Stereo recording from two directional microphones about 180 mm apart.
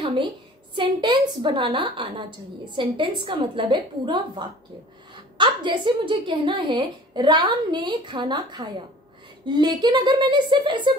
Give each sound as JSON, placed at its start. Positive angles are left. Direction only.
{"t": 0.0, "sound": "a woman's voice", "side_deg": -25}